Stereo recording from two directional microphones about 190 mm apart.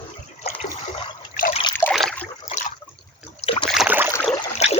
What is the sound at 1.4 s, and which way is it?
Trickle, 35° left (ahead or behind).